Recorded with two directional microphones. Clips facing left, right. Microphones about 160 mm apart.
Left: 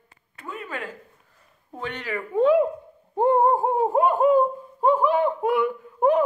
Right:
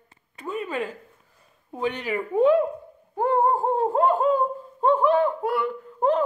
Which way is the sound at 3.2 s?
20° left (ahead or behind).